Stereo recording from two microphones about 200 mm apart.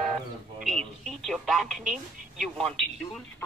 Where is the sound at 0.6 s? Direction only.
Centre (ahead or behind).